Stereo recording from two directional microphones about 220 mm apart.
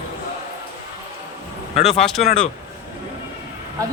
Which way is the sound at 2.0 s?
Centre (ahead or behind).